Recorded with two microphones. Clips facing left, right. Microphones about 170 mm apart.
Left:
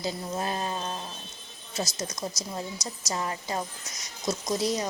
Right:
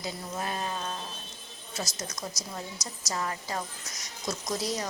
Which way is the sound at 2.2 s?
25° left (ahead or behind).